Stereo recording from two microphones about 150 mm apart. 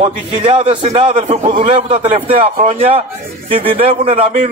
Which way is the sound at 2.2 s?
40° right (ahead or behind).